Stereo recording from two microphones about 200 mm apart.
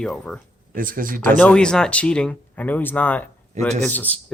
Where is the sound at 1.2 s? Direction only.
10° left (ahead or behind).